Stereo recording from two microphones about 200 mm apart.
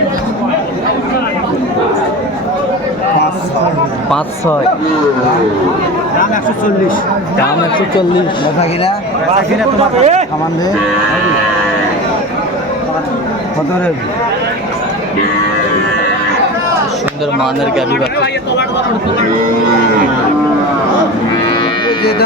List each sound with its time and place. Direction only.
10.0 s speech: 35° right (ahead or behind)